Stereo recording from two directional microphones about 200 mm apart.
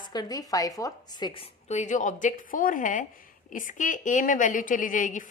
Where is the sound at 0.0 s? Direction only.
20° left (ahead or behind).